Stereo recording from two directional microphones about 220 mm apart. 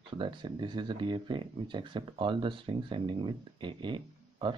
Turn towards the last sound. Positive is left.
turn(degrees=-20)  # may be behind; listen again after turning